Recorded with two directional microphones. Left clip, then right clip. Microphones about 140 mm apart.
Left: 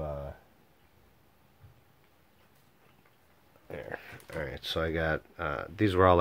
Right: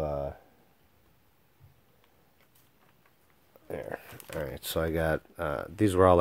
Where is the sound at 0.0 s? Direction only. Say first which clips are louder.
Right 6 dB; 90° right.